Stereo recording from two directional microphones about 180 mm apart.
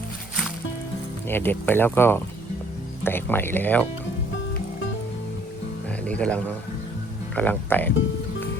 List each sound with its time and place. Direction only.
1.3 s speech: 10° left (ahead or behind)
6.1 s speech: 5° left (ahead or behind)